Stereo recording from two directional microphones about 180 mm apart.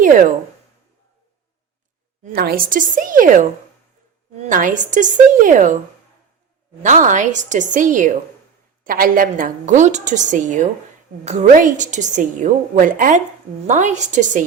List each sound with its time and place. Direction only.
0.0 s speech: 50° right (ahead or behind)
2.2 s a woman's voice: 60° right (ahead or behind)
4.4 s a woman's voice: 45° right (ahead or behind)
6.8 s a woman's voice: 45° right (ahead or behind)